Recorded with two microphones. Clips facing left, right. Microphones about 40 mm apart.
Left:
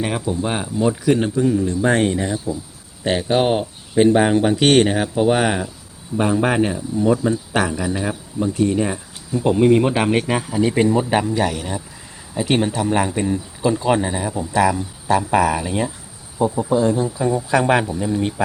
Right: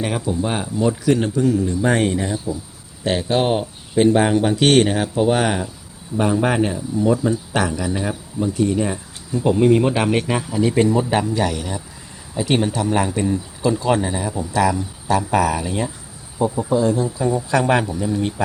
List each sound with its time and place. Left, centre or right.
0.0 s speech: centre
1.8 s speech: centre